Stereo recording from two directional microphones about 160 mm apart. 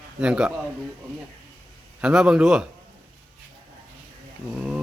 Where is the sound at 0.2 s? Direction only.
5° right (ahead or behind).